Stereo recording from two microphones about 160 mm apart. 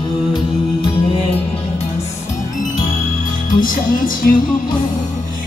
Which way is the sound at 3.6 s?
60° left (ahead or behind).